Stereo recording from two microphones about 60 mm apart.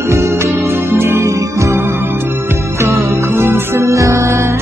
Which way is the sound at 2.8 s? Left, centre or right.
Right.